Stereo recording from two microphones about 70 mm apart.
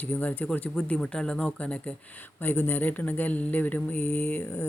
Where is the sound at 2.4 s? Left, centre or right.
Left.